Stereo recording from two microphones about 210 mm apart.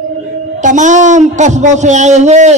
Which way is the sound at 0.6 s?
35° right (ahead or behind).